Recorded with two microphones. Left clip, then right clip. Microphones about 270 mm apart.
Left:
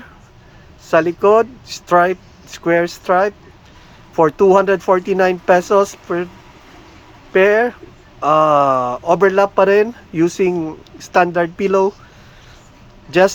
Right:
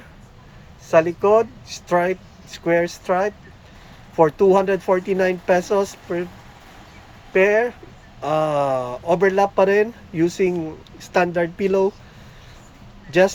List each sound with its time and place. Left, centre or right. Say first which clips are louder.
0.9 s speech: left 3 dB; left
7.3 s speech: left 4 dB; left
13.1 s speech: left 4 dB; centre